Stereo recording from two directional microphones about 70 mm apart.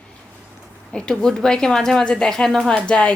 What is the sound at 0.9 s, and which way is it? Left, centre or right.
Speech, centre.